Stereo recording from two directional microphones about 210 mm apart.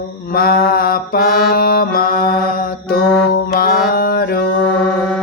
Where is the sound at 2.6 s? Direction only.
45° left (ahead or behind).